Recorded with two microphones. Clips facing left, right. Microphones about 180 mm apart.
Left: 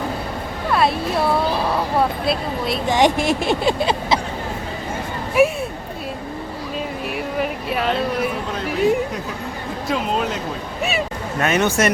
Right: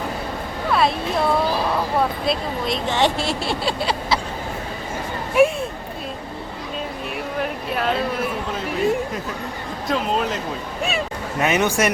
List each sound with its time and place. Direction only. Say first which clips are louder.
0.7 s a sound: left 1 dB; centre (ahead or behind)
2.2 s speech: left 1 dB; 5° left (ahead or behind); by 4.2 s 20° left (ahead or behind)
5.4 s speech: even; 5° left (ahead or behind)
7.3 s a sound: left 1 dB; 5° left (ahead or behind)
9.9 s speech: even; centre (ahead or behind)
11.3 s speech: left 1 dB; 15° right (ahead or behind)